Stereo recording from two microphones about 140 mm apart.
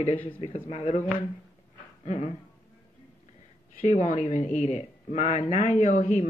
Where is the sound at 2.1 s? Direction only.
50° left (ahead or behind).